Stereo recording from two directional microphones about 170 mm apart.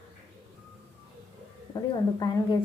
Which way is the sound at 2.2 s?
20° left (ahead or behind).